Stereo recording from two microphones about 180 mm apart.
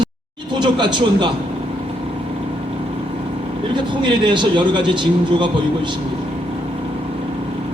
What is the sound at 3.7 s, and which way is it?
Speech, 25° right (ahead or behind).